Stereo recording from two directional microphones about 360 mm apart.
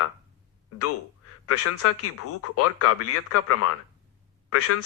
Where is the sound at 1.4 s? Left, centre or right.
Left.